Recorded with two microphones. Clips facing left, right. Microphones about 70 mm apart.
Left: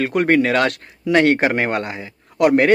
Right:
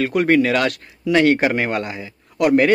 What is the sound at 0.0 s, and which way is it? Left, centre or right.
Speech, left.